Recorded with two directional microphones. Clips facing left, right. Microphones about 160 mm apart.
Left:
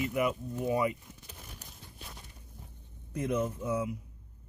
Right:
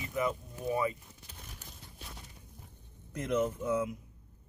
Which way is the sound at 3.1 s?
10° left (ahead or behind).